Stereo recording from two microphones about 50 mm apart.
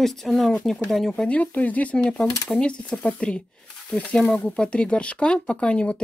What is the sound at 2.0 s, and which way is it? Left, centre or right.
Speech, centre.